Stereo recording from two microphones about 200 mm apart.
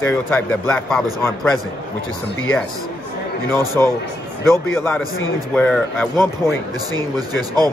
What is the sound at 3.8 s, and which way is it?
Speech, 10° left (ahead or behind).